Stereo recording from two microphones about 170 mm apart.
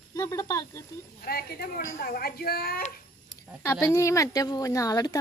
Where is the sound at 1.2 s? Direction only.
65° left (ahead or behind).